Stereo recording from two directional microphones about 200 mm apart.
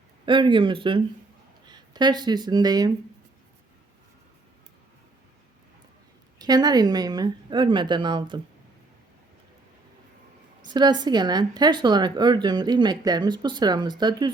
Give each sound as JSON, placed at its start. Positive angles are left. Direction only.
{"t": 0.3, "sound": "speech", "side_deg": -25}
{"t": 6.4, "sound": "speech", "side_deg": -20}
{"t": 10.7, "sound": "speech", "side_deg": -20}